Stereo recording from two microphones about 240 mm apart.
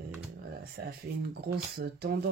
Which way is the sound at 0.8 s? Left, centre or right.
Right.